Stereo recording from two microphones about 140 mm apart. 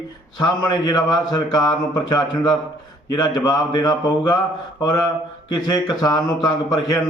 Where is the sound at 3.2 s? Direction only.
30° left (ahead or behind).